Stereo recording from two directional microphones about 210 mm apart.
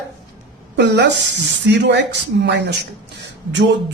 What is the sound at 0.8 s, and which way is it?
Speech, 55° right (ahead or behind).